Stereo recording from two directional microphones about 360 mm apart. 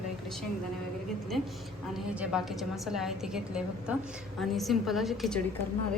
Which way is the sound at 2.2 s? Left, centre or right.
Centre.